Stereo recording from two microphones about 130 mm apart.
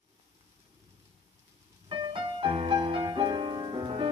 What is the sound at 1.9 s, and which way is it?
Music, 40° right (ahead or behind).